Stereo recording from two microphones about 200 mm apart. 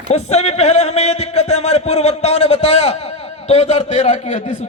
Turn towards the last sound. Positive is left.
turn(degrees=35)  # may be behind; listen again after turning